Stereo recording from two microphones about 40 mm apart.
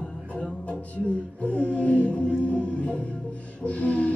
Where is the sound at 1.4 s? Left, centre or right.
Left.